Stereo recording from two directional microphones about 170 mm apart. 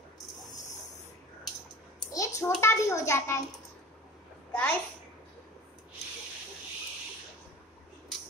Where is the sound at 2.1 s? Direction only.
20° left (ahead or behind).